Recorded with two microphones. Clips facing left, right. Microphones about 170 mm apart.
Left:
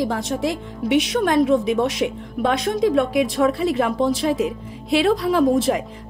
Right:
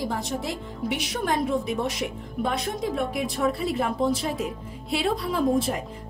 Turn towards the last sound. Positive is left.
turn(degrees=85)